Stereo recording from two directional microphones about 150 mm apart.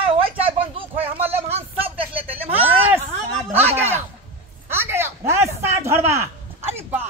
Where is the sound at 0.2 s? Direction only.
35° right (ahead or behind).